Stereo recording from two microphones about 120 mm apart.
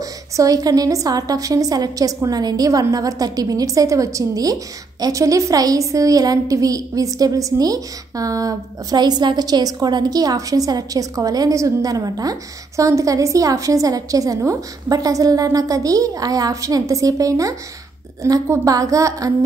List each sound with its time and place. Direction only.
0.0 s a woman's voice: 30° right (ahead or behind)